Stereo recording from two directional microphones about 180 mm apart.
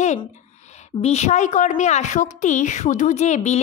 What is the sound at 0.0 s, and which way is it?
A woman's voice, 40° left (ahead or behind).